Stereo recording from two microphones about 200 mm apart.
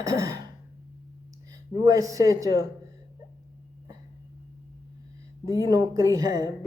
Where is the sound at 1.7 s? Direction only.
15° right (ahead or behind).